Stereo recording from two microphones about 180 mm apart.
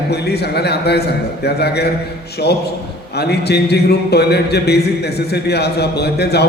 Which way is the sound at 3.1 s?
65° left (ahead or behind).